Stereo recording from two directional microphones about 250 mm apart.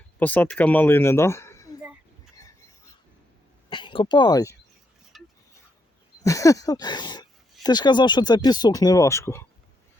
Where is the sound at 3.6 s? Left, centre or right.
Centre.